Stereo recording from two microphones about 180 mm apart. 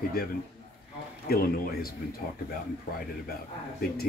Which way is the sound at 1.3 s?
55° left (ahead or behind).